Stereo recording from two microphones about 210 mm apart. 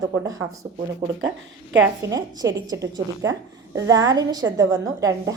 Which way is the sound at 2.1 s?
15° right (ahead or behind).